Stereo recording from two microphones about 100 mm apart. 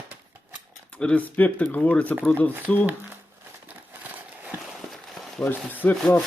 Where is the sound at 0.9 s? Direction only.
10° left (ahead or behind).